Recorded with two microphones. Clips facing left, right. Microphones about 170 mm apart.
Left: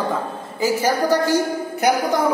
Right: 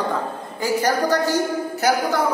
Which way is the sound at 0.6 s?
10° left (ahead or behind).